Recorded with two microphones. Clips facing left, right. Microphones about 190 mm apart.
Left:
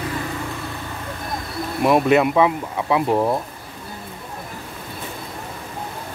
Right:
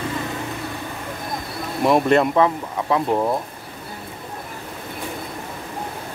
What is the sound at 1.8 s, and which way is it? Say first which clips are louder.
Speech: left 1 dB; 5° left (ahead or behind).